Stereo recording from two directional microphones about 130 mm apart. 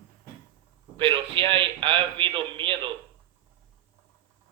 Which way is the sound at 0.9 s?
40° right (ahead or behind).